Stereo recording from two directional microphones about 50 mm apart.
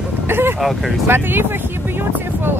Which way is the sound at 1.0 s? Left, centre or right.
Right.